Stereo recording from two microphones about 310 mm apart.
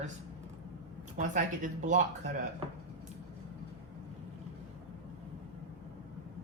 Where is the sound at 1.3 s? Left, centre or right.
Right.